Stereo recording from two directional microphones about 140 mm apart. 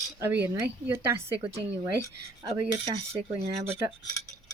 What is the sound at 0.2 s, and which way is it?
A woman's voice, 15° right (ahead or behind).